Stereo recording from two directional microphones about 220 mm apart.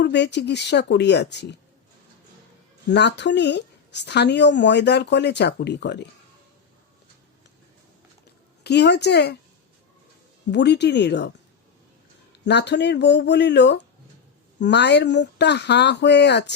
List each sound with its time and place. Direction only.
0.0 s a woman's voice: 50° left (ahead or behind)
2.9 s a woman's voice: 50° left (ahead or behind)
8.6 s a woman's voice: 50° left (ahead or behind)
10.5 s a woman's voice: 50° left (ahead or behind)
12.3 s a woman's voice: 50° left (ahead or behind)